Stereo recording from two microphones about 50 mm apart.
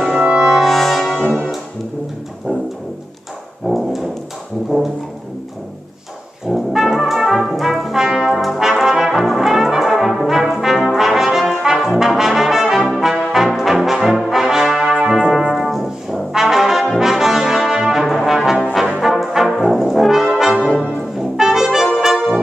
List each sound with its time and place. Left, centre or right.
0.2 s brass instrument: centre
0.5 s brass instrument: centre
3.6 s brass instrument: centre
6.4 s brass instrument: centre
15.0 s brass instrument: centre
19.8 s brass instrument: centre